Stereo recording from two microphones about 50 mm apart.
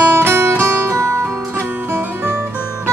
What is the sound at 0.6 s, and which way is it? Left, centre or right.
Music, right.